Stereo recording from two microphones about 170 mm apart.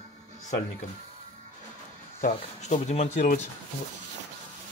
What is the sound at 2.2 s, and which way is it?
Speech, 45° left (ahead or behind).